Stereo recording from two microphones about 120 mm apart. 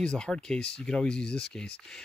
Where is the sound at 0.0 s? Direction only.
5° left (ahead or behind).